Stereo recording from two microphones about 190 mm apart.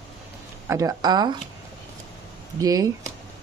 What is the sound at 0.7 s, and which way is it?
Speech, 15° right (ahead or behind).